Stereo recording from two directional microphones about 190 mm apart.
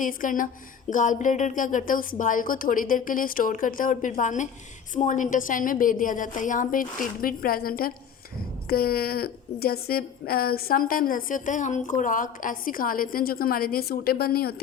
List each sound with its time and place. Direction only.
0.0 s a woman's voice: 45° left (ahead or behind)